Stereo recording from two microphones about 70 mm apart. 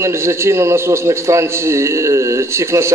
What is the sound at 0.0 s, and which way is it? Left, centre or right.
A man's voice, right.